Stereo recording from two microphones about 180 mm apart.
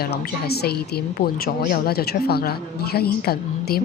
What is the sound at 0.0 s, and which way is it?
A woman's voice, 60° left (ahead or behind).